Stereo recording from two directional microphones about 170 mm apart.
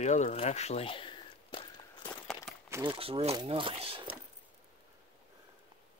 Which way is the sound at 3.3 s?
30° right (ahead or behind).